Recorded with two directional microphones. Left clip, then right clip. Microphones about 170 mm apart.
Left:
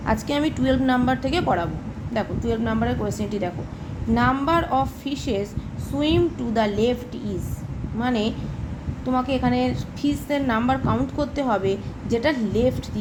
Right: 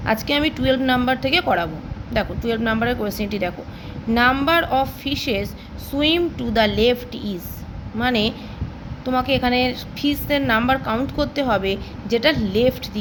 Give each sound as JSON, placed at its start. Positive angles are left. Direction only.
{"t": 0.0, "sound": "a woman's voice", "side_deg": -10}